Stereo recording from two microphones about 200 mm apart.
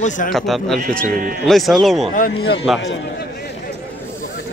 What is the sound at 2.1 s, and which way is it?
Speech, 50° left (ahead or behind).